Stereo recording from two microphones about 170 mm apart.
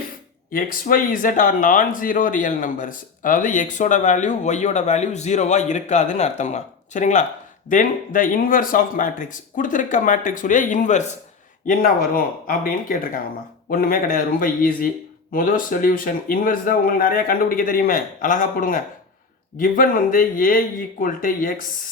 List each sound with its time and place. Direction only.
0.5 s speech: 55° left (ahead or behind)
11.6 s speech: 55° left (ahead or behind)